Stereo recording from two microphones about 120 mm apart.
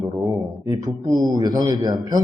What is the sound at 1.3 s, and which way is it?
Speech, 35° right (ahead or behind).